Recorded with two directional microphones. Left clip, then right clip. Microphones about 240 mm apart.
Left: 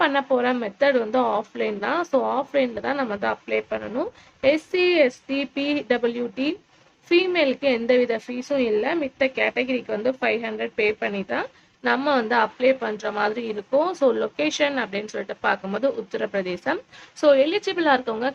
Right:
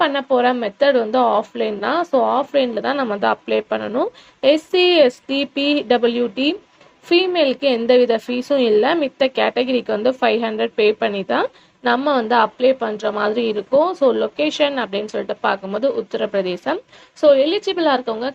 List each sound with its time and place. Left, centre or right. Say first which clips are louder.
0.0 s a woman's voice: right 4 dB; centre